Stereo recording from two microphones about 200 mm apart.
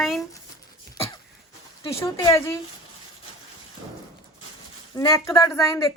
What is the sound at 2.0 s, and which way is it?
Speech, 15° left (ahead or behind).